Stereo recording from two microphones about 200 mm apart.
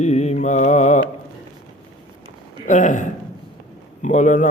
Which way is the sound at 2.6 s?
40° left (ahead or behind).